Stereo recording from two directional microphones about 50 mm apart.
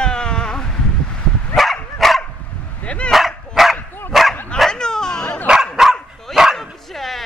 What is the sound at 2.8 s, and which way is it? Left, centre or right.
Dog, left.